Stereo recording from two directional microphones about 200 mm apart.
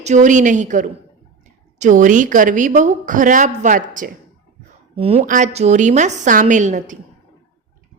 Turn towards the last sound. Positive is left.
turn(degrees=-40)  # may be behind; listen again after turning